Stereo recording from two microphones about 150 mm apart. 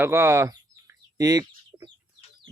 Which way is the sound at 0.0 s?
15° right (ahead or behind).